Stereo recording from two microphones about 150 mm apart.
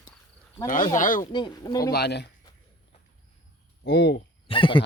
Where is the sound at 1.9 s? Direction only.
90° left.